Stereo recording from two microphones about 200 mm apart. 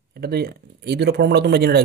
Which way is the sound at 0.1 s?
50° right (ahead or behind).